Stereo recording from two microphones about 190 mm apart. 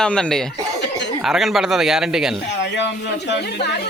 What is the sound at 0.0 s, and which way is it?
A man's voice, 5° left (ahead or behind).